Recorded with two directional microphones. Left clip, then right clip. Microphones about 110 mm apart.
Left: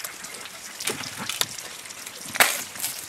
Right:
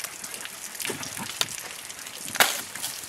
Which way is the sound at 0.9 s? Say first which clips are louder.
Left 4 dB; 30° left (ahead or behind).